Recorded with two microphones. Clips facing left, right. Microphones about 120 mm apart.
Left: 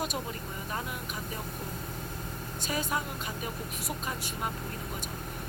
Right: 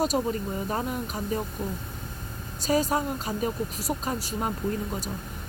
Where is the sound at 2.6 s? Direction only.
35° right (ahead or behind).